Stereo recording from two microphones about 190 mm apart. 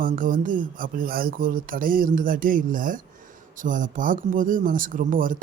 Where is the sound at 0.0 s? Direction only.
45° right (ahead or behind).